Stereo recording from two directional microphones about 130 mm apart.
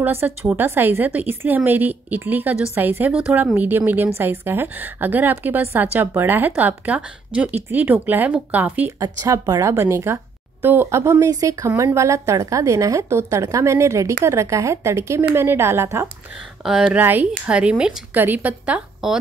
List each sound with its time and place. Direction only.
0.0 s a woman's voice: 15° right (ahead or behind)
9.0 s a woman's voice: 30° right (ahead or behind)
16.6 s a woman's voice: 5° right (ahead or behind)